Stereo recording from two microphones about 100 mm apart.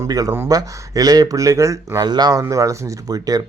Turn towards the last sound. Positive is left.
turn(degrees=-40)  # may be behind; listen again after turning